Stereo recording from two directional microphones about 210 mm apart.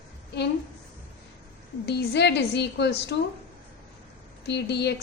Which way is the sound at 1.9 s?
50° left (ahead or behind).